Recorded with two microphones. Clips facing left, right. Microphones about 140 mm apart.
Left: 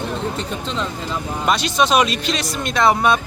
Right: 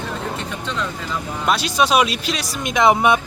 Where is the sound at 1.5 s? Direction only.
5° right (ahead or behind).